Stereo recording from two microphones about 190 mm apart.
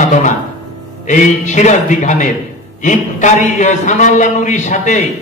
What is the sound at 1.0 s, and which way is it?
Speech, 40° left (ahead or behind).